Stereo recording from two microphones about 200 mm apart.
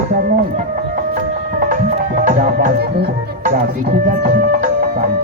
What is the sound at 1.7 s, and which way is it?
Music, 40° right (ahead or behind).